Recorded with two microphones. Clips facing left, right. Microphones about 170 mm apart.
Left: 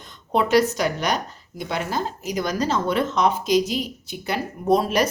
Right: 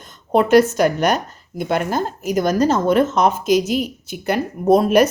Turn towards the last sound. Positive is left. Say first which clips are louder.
# right 6 dB
turn(degrees=-50)  # may be behind; listen again after turning